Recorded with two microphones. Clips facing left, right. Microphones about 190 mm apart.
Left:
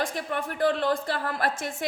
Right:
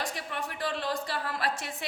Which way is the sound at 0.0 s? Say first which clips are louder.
Left 6 dB; 50° left (ahead or behind).